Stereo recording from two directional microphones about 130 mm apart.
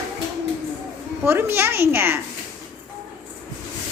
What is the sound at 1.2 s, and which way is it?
Speech, 15° right (ahead or behind).